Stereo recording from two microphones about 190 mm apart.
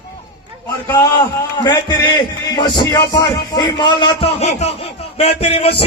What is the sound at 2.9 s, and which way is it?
Speech, 20° left (ahead or behind).